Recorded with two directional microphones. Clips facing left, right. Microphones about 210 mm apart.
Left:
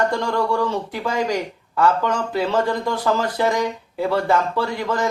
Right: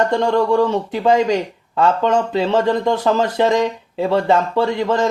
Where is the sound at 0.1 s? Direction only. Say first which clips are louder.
Right 6 dB; 20° right (ahead or behind).